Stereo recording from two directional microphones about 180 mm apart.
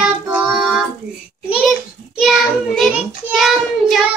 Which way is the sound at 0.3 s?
Centre (ahead or behind).